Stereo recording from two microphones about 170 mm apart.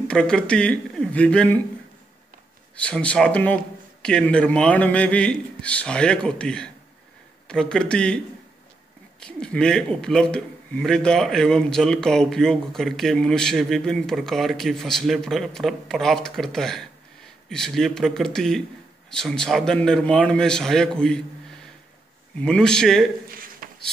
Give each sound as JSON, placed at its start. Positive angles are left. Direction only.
{"t": 0.1, "sound": "speech", "side_deg": 5}
{"t": 2.7, "sound": "a man's voice", "side_deg": 5}
{"t": 9.2, "sound": "a man's voice", "side_deg": 5}
{"t": 22.4, "sound": "a man's voice", "side_deg": 5}
{"t": 23.3, "sound": "a sound", "side_deg": -55}